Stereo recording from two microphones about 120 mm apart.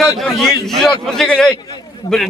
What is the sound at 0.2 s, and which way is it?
A man's voice, centre (ahead or behind).